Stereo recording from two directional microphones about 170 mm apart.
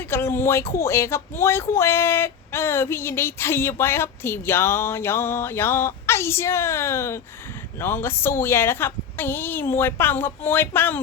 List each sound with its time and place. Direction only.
0.0 s speech: 15° left (ahead or behind)